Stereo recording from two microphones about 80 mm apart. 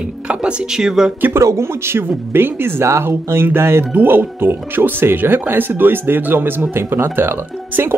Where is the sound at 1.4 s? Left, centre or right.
Right.